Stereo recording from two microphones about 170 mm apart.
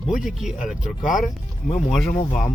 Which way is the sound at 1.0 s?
50° left (ahead or behind).